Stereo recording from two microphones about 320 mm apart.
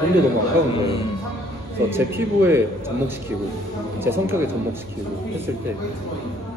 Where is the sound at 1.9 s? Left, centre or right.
Centre.